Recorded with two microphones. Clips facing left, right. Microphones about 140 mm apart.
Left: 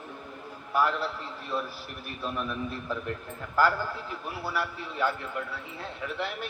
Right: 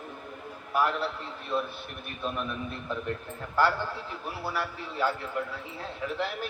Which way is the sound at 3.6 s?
30° right (ahead or behind).